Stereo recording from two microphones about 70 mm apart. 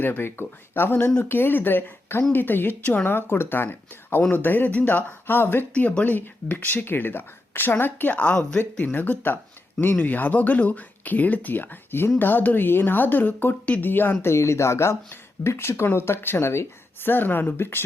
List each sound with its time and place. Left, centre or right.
0.0 s speech: left
5.7 s speech: centre